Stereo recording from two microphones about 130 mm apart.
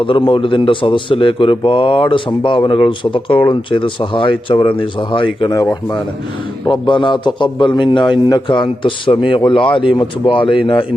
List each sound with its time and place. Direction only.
0.0 s a man's voice: 40° left (ahead or behind)
6.7 s a man's voice: 40° left (ahead or behind)